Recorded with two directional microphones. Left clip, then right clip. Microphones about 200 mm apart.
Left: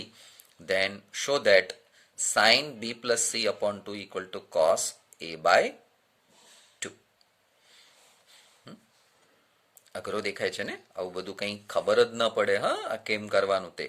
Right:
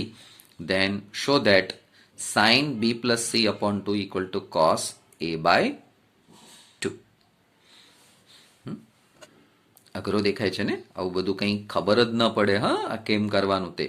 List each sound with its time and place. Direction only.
0.0 s speech: 15° left (ahead or behind)
9.9 s speech: 15° left (ahead or behind)